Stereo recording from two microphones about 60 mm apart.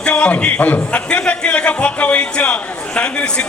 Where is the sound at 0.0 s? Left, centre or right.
Left.